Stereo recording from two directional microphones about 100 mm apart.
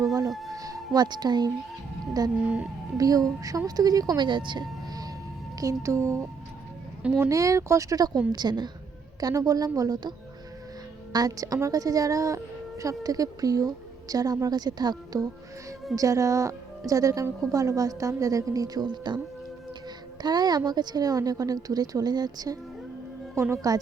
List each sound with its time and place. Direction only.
0.0 s music: 35° right (ahead or behind)
0.3 s music: centre (ahead or behind)
0.5 s music: 35° right (ahead or behind)
0.9 s a woman's voice: 45° right (ahead or behind)
5.5 s a woman's voice: 30° right (ahead or behind); by 19.2 s 50° right (ahead or behind)
20.2 s a woman's voice: 45° right (ahead or behind)
23.3 s a woman's voice: 30° right (ahead or behind)